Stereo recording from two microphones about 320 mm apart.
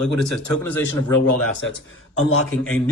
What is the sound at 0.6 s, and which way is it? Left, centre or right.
Speech, centre.